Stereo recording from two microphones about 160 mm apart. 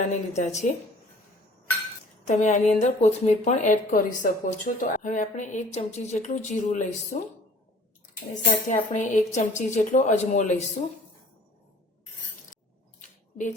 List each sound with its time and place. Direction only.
0.1 s speech: 45° left (ahead or behind)
2.2 s speech: 50° left (ahead or behind)
8.6 s speech: 50° left (ahead or behind)